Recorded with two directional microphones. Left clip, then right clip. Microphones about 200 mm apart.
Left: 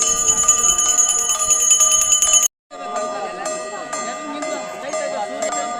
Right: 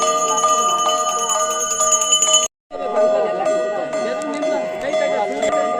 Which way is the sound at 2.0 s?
25° left (ahead or behind).